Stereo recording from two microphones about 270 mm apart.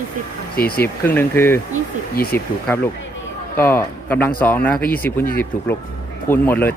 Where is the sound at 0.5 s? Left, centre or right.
Left.